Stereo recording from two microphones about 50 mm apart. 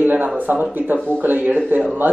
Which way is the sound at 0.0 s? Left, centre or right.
Right.